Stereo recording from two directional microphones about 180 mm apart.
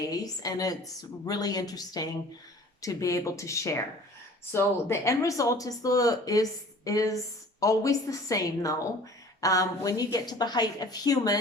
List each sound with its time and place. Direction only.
0.1 s speech: 20° left (ahead or behind)